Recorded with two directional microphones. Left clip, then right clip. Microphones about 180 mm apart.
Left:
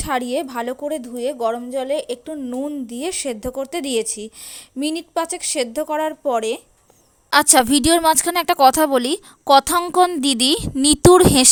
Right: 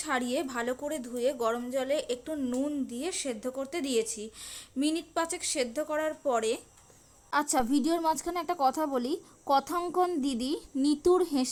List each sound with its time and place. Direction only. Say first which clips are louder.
0.0 s a woman's voice: left 9 dB; 30° left (ahead or behind)
2.8 s speech: left 9 dB; 35° left (ahead or behind)
7.3 s a woman's voice: left 14 dB; 55° left (ahead or behind)